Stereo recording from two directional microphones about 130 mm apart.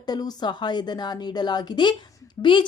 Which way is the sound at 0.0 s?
30° left (ahead or behind).